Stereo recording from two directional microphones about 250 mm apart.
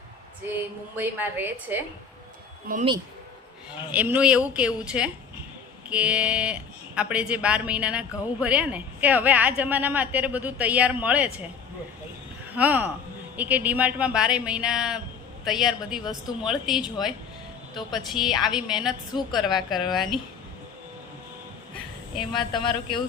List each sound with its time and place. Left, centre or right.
0.5 s a woman's voice: centre
2.7 s speech: right
3.7 s speech: centre
12.5 s a woman's voice: centre
18.3 s speech: centre
19.5 s a woman's voice: centre
19.9 s speech: centre
22.1 s speech: centre